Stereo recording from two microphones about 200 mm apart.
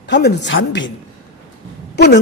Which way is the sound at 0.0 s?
60° left (ahead or behind).